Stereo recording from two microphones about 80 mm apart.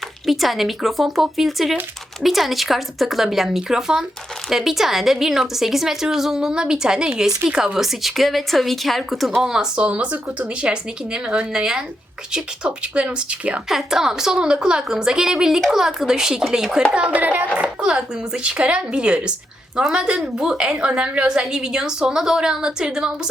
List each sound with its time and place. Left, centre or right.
0.3 s a woman's voice: centre; by 17.7 s right
17.7 s a woman's voice: centre